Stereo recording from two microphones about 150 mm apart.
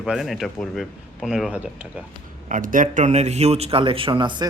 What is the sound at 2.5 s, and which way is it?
A man's voice, 65° right (ahead or behind).